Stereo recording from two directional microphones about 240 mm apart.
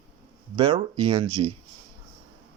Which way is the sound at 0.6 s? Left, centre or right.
Right.